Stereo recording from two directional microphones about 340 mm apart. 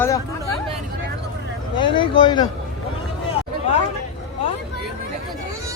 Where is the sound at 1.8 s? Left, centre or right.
Centre.